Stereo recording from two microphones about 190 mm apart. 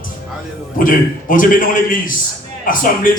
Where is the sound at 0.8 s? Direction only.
45° left (ahead or behind).